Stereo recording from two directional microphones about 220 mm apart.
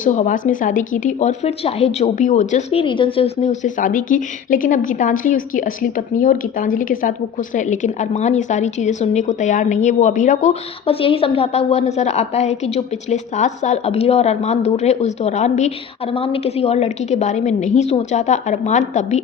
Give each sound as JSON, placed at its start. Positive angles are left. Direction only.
{"t": 0.0, "sound": "a woman's voice", "side_deg": 35}